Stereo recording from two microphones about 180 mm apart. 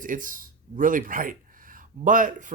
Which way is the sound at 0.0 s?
50° right (ahead or behind).